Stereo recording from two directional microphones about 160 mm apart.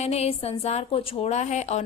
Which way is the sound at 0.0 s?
40° left (ahead or behind).